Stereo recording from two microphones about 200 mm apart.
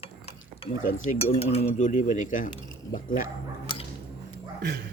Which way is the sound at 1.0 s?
30° left (ahead or behind).